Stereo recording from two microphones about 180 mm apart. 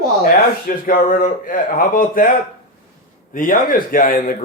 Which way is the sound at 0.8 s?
50° left (ahead or behind).